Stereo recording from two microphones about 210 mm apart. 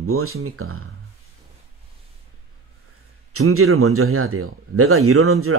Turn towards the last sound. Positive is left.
turn(degrees=-90)